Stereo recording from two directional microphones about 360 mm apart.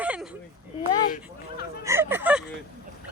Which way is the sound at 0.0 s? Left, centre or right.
Centre.